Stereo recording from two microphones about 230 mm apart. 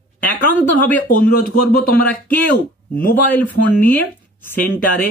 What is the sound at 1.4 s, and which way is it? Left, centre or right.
Speech, left.